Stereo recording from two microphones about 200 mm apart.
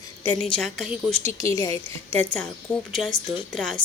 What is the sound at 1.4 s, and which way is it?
A woman's voice, 15° left (ahead or behind).